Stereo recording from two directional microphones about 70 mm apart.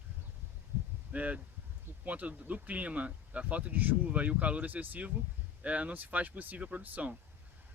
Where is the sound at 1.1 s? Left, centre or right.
Centre.